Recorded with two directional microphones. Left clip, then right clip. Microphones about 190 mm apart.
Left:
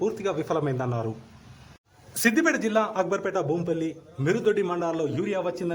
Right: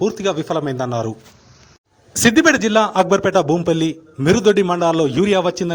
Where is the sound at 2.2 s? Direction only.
30° right (ahead or behind).